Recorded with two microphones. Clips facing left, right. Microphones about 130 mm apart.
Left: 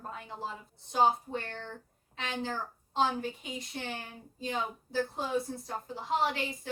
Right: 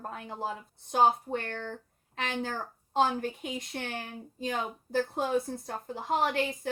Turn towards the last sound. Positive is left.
turn(degrees=-50)  # may be behind; listen again after turning